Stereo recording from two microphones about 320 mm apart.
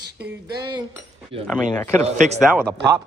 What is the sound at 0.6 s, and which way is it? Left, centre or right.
Speech, centre.